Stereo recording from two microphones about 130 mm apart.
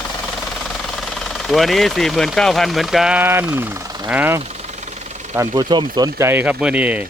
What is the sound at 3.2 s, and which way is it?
Speech, 15° right (ahead or behind).